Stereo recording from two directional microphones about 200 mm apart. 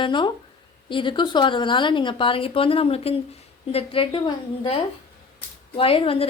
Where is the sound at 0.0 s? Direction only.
25° left (ahead or behind).